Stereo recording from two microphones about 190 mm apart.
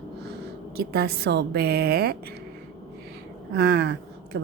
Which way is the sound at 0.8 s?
55° right (ahead or behind).